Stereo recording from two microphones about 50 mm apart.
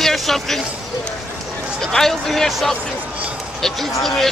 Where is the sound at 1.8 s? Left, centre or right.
Centre.